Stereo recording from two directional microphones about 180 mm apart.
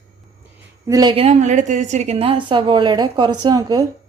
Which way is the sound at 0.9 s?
20° right (ahead or behind).